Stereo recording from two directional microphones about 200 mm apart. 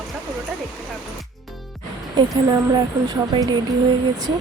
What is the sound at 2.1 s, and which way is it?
A woman's voice, 20° right (ahead or behind).